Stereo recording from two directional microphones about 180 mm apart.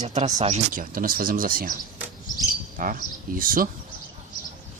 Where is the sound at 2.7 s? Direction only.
50° right (ahead or behind).